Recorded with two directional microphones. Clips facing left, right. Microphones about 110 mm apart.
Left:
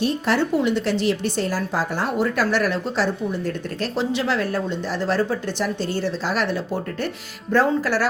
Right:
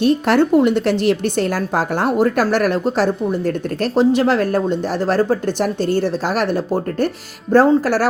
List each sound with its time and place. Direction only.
0.0 s a woman's voice: 55° right (ahead or behind)